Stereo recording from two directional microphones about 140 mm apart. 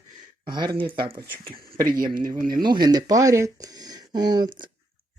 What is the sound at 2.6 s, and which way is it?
Speech, 30° right (ahead or behind).